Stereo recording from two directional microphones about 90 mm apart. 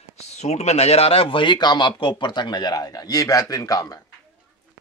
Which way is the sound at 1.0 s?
90° left.